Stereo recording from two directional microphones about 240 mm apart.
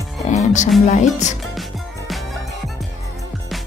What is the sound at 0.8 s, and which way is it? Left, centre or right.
Speech, left.